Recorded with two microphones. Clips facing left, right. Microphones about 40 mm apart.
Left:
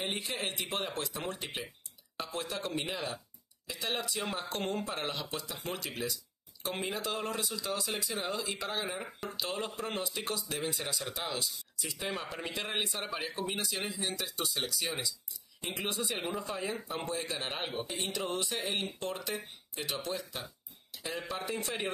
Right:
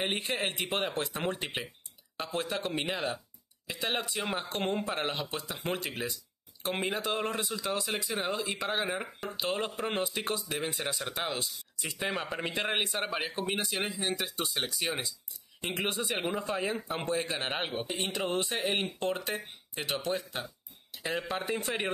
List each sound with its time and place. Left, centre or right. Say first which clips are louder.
0.0 s a man's voice: right 4 dB; right
9.4 s a man's voice: right 4 dB; right
13.1 s a man's voice: right 3 dB; right
20.9 s a sound: right 5 dB; right
21.2 s a man's voice: right 1 dB; right